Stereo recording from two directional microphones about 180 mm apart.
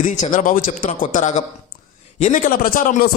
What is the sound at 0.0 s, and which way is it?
Speech, 45° left (ahead or behind).